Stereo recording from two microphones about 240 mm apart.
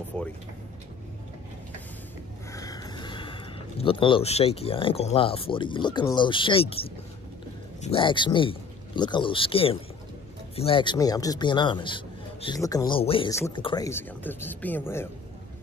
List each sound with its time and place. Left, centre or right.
2.5 s a man's voice: centre